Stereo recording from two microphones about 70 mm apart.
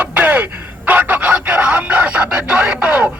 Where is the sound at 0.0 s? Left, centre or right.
Right.